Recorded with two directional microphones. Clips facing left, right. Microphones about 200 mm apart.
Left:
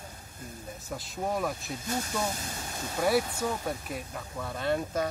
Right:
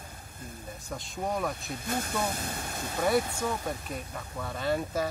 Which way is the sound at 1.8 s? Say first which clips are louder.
Right 1 dB; 55° right (ahead or behind).